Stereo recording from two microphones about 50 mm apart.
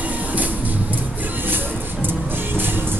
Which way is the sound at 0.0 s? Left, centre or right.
Right.